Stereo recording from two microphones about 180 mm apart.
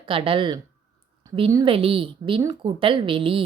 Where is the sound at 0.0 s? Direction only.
30° right (ahead or behind).